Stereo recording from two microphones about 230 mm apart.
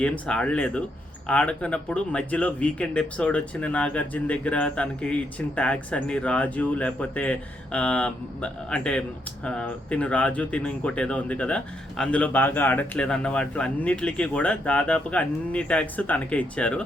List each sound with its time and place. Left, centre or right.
0.0 s speech: centre